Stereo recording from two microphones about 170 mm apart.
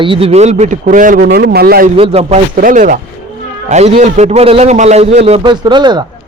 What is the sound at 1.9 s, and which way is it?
Speech, 35° right (ahead or behind).